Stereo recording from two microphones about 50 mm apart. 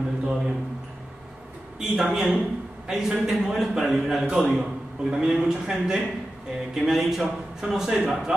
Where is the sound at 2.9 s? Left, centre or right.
Centre.